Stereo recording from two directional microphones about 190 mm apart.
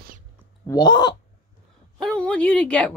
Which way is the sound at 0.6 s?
20° left (ahead or behind).